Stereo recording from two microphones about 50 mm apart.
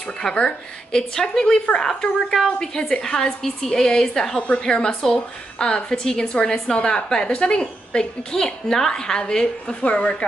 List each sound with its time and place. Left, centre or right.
0.0 s a woman's voice: centre
4.4 s a woman's voice: left
4.6 s a woman's voice: centre
9.8 s a woman's voice: left